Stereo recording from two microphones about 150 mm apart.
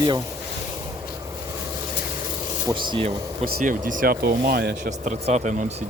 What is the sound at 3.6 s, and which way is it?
Speech, 60° right (ahead or behind).